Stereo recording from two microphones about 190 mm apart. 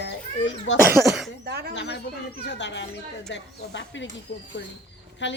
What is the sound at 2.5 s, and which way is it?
Speech, 65° left (ahead or behind).